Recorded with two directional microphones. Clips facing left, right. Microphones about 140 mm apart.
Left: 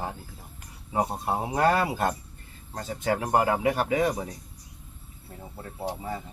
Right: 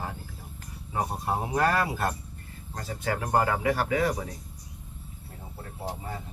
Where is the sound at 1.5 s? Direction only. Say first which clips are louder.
Left 3 dB; 25° left (ahead or behind).